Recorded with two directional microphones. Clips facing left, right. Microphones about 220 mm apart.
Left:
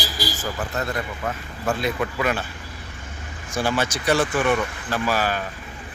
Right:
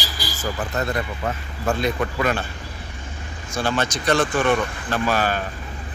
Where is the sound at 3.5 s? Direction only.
10° left (ahead or behind).